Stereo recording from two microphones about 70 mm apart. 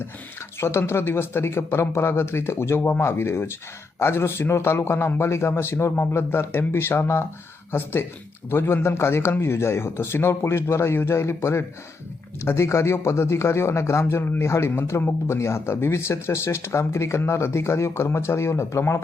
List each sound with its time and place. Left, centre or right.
0.6 s speech: left